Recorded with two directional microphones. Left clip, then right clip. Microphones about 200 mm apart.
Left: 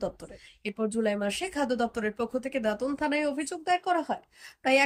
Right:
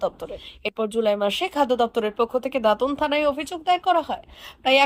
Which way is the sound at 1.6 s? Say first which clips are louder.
Right 8 dB; 60° right (ahead or behind).